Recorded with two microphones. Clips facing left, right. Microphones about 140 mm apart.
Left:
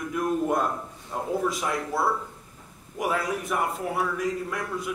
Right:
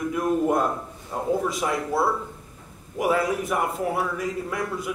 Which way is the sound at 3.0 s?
5° right (ahead or behind).